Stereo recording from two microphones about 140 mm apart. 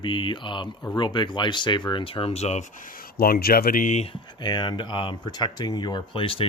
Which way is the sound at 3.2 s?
90° left.